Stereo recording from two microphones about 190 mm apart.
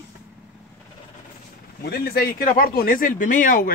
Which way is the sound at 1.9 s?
55° left (ahead or behind).